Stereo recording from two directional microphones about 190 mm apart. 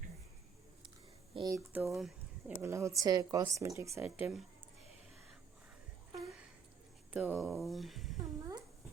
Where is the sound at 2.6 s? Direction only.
15° right (ahead or behind).